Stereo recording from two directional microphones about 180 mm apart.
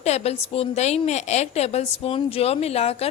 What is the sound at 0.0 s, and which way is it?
A woman's voice, 35° left (ahead or behind).